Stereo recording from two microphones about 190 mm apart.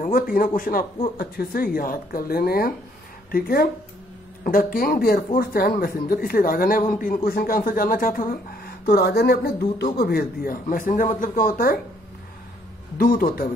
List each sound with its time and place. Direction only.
0.0 s speech: 50° left (ahead or behind)
12.9 s speech: 50° left (ahead or behind)